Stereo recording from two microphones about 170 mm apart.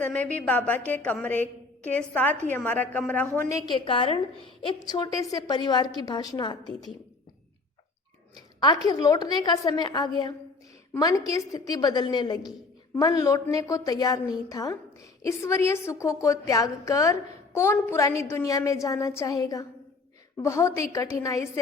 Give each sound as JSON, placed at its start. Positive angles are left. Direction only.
{"t": 0.0, "sound": "a woman's voice", "side_deg": 10}
{"t": 3.7, "sound": "a woman's voice", "side_deg": 30}
{"t": 8.4, "sound": "a woman's voice", "side_deg": 20}